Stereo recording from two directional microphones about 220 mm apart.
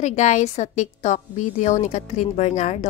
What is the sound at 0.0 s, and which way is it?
A woman's voice, 35° left (ahead or behind).